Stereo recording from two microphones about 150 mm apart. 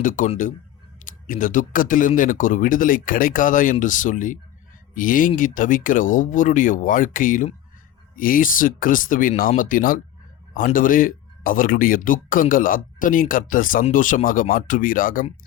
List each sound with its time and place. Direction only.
0.0 s speech: 60° left (ahead or behind)